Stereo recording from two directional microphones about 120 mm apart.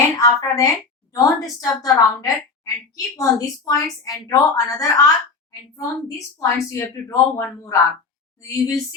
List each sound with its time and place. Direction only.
0.2 s a woman's voice: 25° left (ahead or behind)